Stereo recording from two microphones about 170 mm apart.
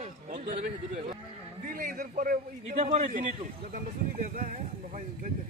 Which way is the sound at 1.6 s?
55° right (ahead or behind).